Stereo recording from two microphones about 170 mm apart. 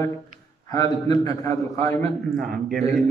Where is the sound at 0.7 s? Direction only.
20° left (ahead or behind).